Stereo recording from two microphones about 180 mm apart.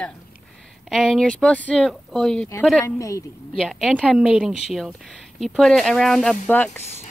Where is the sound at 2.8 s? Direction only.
15° left (ahead or behind).